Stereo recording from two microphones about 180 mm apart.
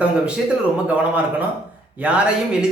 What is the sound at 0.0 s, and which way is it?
Speech, 5° right (ahead or behind).